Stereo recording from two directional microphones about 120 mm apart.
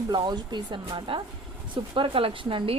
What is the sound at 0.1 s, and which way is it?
Speech, 35° right (ahead or behind).